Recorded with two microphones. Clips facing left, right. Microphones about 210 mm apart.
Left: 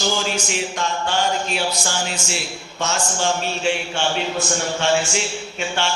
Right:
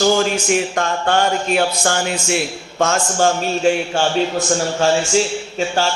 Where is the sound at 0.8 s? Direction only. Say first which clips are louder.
Right 5 dB; 55° right (ahead or behind).